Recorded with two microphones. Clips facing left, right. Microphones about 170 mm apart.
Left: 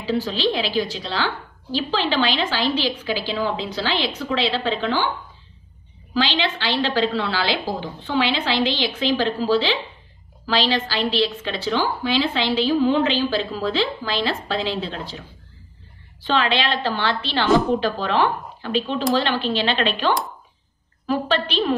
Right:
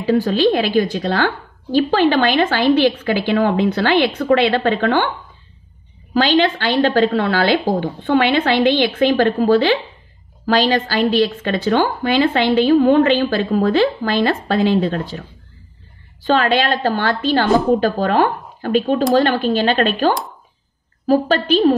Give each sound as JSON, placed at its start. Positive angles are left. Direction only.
{"t": 0.0, "sound": "a woman's voice", "side_deg": -50}
{"t": 6.1, "sound": "a woman's voice", "side_deg": -50}